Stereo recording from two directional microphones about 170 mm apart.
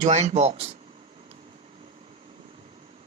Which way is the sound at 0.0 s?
45° right (ahead or behind).